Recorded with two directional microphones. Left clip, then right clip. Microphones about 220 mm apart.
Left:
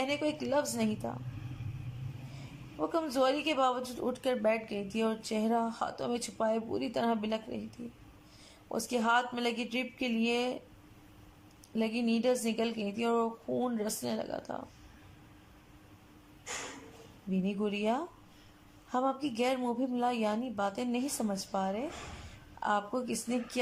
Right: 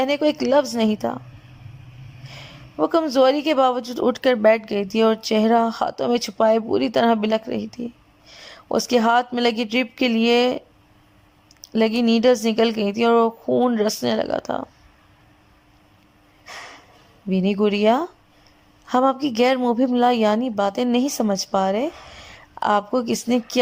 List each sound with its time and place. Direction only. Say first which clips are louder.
0.0 s speech: right 13 dB; 30° right (ahead or behind)
2.7 s speech: right 13 dB; 30° right (ahead or behind)
11.6 s speech: right 14 dB; 25° right (ahead or behind)
17.2 s speech: right 15 dB; 30° right (ahead or behind)